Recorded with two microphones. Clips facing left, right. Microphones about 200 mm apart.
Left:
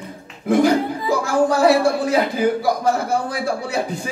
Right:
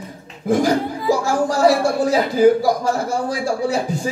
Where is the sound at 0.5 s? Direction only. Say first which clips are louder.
Left 2 dB; 60° left (ahead or behind).